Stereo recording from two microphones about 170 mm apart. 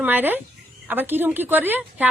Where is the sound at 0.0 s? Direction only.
10° right (ahead or behind).